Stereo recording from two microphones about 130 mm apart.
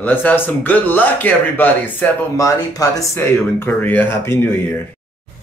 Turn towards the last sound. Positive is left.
turn(degrees=20)  # may be behind; listen again after turning